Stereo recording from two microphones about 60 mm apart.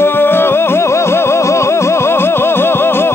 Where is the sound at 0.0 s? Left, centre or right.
Left.